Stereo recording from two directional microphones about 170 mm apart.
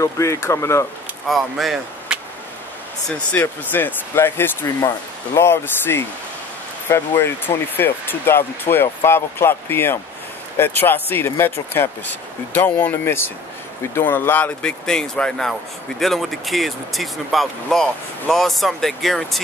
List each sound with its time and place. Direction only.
0.0 s speech: 15° left (ahead or behind)
1.3 s speech: centre (ahead or behind)
3.1 s speech: 10° left (ahead or behind)